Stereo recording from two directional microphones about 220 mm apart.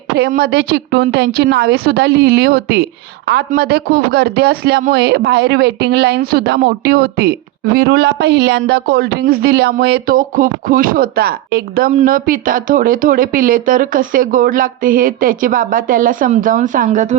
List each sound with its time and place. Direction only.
0.2 s a woman's voice: 45° right (ahead or behind)